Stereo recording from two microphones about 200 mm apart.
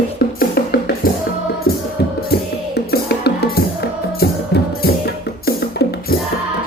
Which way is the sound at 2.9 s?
55° left (ahead or behind).